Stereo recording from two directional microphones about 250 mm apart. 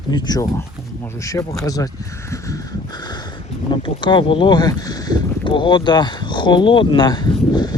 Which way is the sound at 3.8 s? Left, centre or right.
Centre.